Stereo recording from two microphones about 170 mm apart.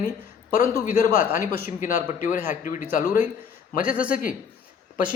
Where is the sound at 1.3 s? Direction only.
55° left (ahead or behind).